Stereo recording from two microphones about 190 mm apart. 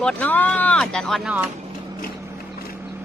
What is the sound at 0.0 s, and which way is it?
Speech, 5° left (ahead or behind).